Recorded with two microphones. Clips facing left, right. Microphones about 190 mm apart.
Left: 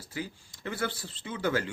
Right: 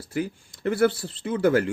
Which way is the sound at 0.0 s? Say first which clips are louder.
Right 9 dB; 60° right (ahead or behind).